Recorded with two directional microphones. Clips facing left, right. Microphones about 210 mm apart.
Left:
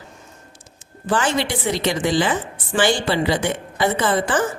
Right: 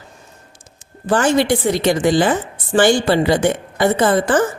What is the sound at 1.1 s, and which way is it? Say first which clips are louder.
A woman's voice: right 6 dB; 45° right (ahead or behind).